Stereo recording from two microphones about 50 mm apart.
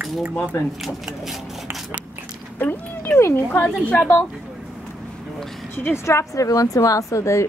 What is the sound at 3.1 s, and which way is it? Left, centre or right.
Speech, left.